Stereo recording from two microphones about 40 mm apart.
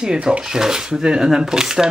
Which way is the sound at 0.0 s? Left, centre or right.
Right.